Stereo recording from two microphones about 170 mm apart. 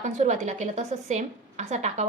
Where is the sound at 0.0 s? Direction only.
45° right (ahead or behind).